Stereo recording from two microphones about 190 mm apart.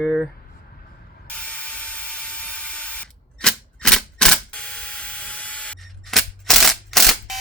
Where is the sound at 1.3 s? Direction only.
5° left (ahead or behind).